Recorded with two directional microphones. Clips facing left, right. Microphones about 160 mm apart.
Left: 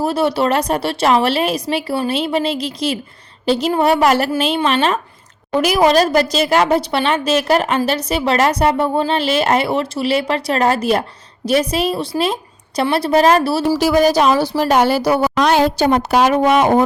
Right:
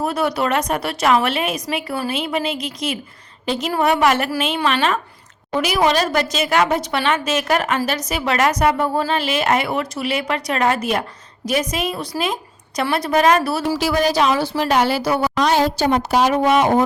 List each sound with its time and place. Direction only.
0.0 s a woman's voice: 30° left (ahead or behind)
13.7 s a woman's voice: 45° left (ahead or behind)
15.4 s a woman's voice: 65° left (ahead or behind)